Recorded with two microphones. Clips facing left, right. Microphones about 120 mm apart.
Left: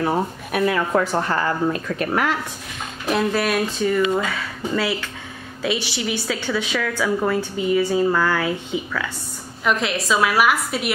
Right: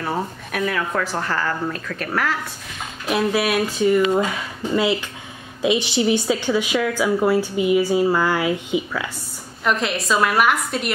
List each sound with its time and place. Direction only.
0.0 s speech: 5° left (ahead or behind)
1.1 s speech: 20° left (ahead or behind)
3.1 s a woman's voice: 5° right (ahead or behind)
4.0 s a woman's voice: 25° right (ahead or behind)
9.7 s a woman's voice: centre (ahead or behind)